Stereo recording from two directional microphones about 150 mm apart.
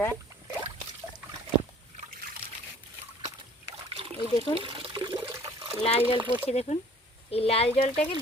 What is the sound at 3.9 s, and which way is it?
Trickle, 35° right (ahead or behind).